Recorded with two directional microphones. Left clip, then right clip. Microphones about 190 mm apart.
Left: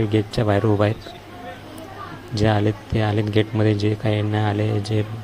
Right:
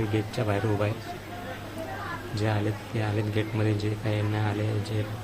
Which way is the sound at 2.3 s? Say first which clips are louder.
Left 11 dB; 30° left (ahead or behind).